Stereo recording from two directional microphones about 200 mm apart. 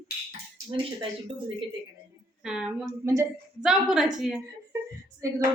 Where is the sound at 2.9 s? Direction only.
15° right (ahead or behind).